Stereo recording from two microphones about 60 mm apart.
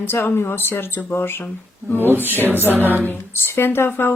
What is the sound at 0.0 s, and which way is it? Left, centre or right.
Speech, left.